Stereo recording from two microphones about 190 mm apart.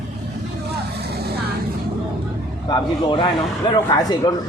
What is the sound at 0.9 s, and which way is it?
Vehicle, 55° right (ahead or behind).